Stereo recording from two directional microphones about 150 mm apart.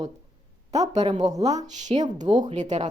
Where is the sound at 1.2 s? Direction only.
25° right (ahead or behind).